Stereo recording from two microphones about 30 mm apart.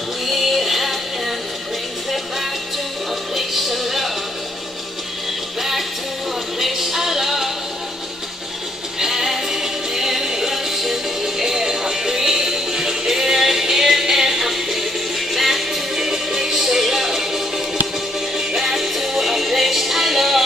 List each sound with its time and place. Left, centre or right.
0.2 s music: centre
3.3 s music: centre
5.6 s music: centre
9.0 s music: centre